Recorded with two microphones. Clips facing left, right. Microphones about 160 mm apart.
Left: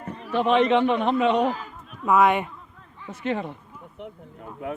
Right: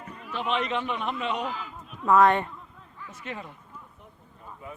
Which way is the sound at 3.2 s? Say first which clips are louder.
Left 11 dB; 80° left.